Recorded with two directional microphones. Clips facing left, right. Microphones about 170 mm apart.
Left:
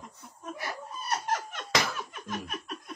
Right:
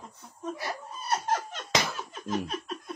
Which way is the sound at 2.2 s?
30° right (ahead or behind).